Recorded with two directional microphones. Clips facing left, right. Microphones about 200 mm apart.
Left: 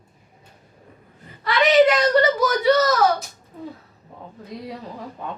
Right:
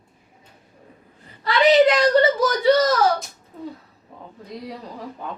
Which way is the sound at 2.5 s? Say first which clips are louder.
Right 1 dB; 30° right (ahead or behind).